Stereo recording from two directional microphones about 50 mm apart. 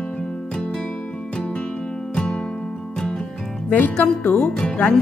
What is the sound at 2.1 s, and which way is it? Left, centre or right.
Music, centre.